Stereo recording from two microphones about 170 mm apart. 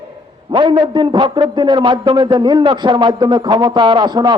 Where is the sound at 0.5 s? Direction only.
30° right (ahead or behind).